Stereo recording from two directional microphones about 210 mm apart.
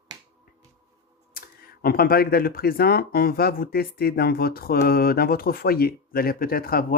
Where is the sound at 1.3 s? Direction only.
45° left (ahead or behind).